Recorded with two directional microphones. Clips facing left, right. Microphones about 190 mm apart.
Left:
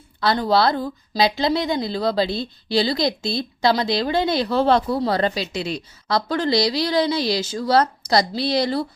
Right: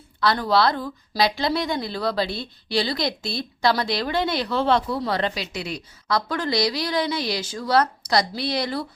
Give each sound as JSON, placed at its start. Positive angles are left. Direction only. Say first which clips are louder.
{"t": 0.2, "sound": "a woman's voice", "louder": "left 2 dB", "side_deg": 25}